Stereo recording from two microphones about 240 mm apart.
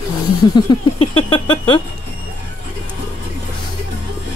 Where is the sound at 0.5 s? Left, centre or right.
Left.